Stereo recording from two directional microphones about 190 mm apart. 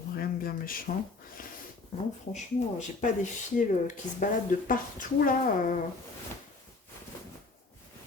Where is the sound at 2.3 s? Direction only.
40° left (ahead or behind).